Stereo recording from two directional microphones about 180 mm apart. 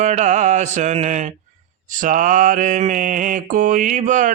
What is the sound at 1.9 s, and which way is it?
Mantra, 45° right (ahead or behind).